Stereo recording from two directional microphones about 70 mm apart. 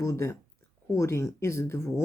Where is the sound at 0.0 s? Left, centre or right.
Left.